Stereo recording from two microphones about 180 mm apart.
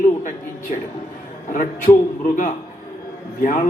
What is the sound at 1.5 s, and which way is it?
Speech, 45° left (ahead or behind).